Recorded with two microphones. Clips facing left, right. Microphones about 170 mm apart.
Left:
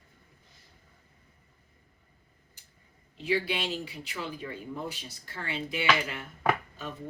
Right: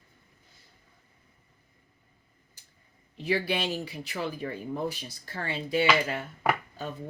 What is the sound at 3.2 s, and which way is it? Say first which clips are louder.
Speech: right 1 dB; 40° right (ahead or behind).